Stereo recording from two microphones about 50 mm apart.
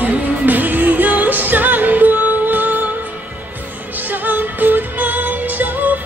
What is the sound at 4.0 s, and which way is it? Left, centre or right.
Music, right.